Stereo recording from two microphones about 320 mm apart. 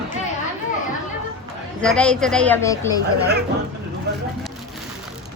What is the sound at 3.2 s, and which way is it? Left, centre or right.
Speech, right.